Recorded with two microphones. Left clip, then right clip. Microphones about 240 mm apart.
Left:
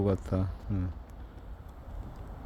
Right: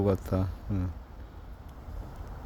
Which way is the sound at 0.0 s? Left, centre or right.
Centre.